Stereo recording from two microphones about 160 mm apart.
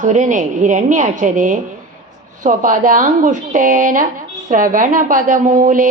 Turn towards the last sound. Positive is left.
turn(degrees=-55)  # may be behind; listen again after turning